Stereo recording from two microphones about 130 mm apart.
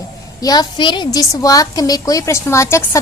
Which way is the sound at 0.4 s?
30° left (ahead or behind).